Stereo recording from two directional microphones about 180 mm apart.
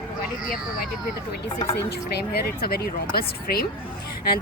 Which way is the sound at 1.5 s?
25° left (ahead or behind).